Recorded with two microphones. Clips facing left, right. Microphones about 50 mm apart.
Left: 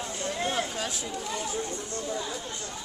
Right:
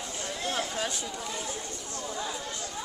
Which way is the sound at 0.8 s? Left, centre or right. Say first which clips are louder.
Even; centre.